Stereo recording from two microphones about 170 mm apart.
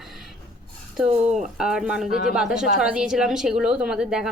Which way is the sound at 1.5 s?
5° right (ahead or behind).